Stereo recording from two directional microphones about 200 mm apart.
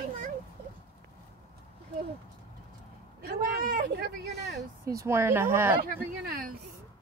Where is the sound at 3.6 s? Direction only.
45° right (ahead or behind).